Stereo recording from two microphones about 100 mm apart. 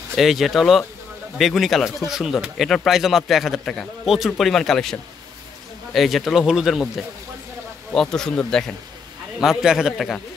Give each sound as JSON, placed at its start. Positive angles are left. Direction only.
{"t": 0.1, "sound": "speech", "side_deg": 0}
{"t": 5.9, "sound": "speech", "side_deg": 0}
{"t": 7.9, "sound": "speech", "side_deg": 5}
{"t": 9.4, "sound": "speech", "side_deg": -5}